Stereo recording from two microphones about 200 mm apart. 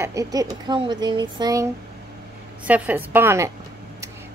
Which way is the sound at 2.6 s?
5° right (ahead or behind).